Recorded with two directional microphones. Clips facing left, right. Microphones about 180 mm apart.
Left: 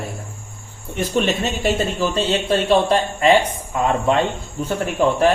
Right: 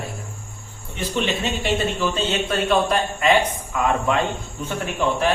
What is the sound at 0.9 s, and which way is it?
A man's voice, 45° left (ahead or behind).